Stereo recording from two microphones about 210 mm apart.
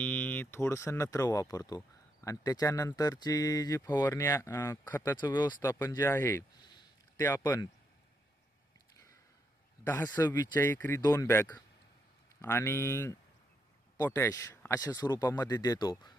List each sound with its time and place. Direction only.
0.0 s speech: 10° left (ahead or behind)
9.8 s speech: 10° left (ahead or behind)